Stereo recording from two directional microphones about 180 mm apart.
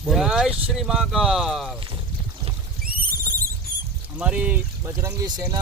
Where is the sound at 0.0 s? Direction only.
Centre (ahead or behind).